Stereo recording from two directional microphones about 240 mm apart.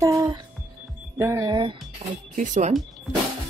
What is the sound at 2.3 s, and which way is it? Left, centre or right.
Speech, right.